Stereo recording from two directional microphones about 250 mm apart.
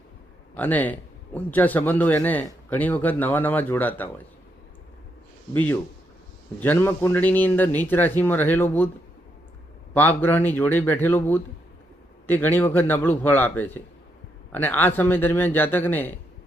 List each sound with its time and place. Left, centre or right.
0.5 s a man's voice: centre
6.6 s a man's voice: centre
9.9 s a man's voice: centre